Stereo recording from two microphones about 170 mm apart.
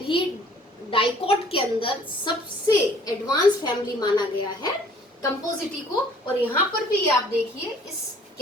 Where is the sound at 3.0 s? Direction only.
25° left (ahead or behind).